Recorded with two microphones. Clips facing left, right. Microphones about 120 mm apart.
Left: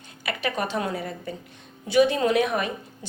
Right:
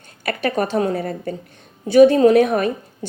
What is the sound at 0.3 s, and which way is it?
A woman's voice, 45° right (ahead or behind).